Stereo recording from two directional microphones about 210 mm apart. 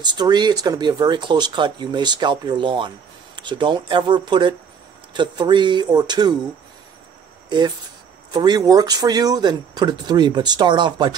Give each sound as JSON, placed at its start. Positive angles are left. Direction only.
{"t": 0.0, "sound": "speech", "side_deg": -20}
{"t": 7.4, "sound": "speech", "side_deg": -20}